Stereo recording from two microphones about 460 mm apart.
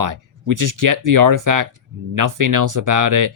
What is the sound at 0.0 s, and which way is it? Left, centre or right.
Speech, right.